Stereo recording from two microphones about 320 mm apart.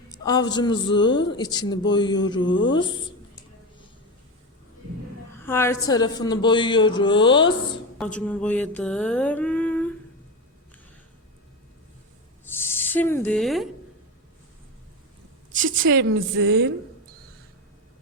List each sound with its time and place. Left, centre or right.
0.3 s speech: centre
2.4 s speech: left
2.6 s speech: centre
5.3 s speech: centre
7.9 s a sound: centre
12.5 s snake: centre
15.5 s a woman's voice: right
15.8 s a woman's voice: right